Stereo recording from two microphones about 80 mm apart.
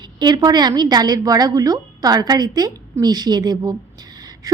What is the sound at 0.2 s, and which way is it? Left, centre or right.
A woman's voice, right.